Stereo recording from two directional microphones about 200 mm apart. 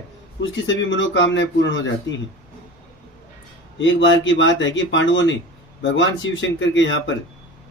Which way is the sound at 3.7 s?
70° left (ahead or behind).